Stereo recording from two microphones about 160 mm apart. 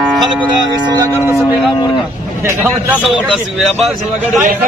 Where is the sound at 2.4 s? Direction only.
15° right (ahead or behind).